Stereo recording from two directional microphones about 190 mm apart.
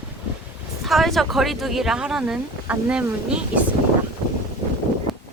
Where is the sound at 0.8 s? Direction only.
Centre (ahead or behind).